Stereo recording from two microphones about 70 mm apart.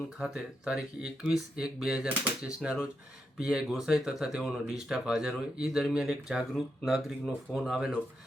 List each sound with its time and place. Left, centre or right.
0.2 s speech: centre